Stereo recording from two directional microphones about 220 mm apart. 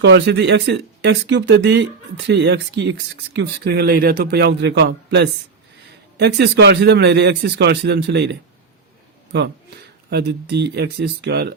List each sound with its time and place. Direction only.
0.0 s speech: 50° right (ahead or behind)